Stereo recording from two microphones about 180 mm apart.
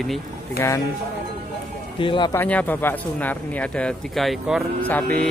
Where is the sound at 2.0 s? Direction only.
25° left (ahead or behind).